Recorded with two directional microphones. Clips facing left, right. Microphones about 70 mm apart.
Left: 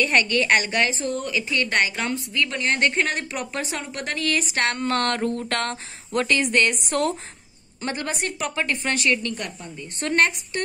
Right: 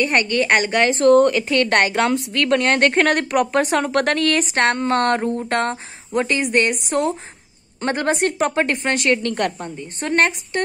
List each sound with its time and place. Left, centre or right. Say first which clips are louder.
0.0 s a woman's voice: right 2 dB; right
0.8 s a woman's voice: right 14 dB; right
2.0 s a woman's voice: right 7 dB; right; by 7.1 s centre
7.8 s a woman's voice: right 8 dB; right
9.2 s a woman's voice: right 9 dB; right
9.8 s a woman's voice: right 2 dB; right